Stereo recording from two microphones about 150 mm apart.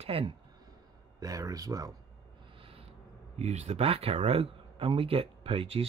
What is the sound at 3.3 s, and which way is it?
Speech, 50° right (ahead or behind).